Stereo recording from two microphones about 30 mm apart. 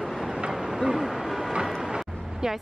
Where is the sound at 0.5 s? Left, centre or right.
Centre.